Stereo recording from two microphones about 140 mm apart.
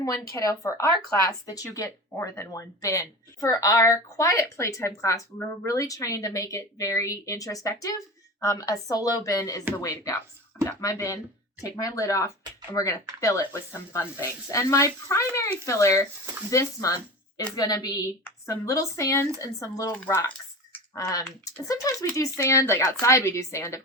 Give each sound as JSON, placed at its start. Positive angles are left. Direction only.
{"t": 0.0, "sound": "a woman's voice", "side_deg": 25}